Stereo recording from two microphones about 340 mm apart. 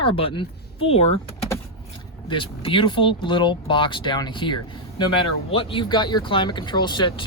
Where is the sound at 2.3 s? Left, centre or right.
Centre.